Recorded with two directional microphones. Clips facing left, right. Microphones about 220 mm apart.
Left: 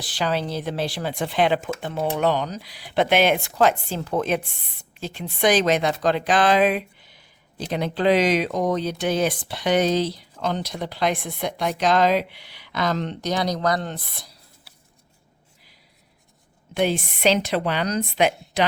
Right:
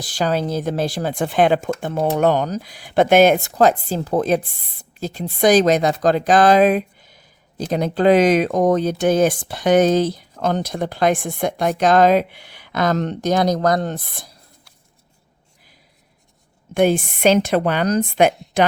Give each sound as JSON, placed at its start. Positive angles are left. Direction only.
{"t": 0.0, "sound": "speech", "side_deg": -45}
{"t": 16.7, "sound": "speech", "side_deg": -50}